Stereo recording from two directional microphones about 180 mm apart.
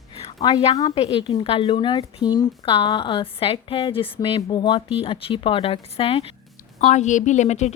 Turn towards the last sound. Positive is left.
turn(degrees=40)  # may be behind; listen again after turning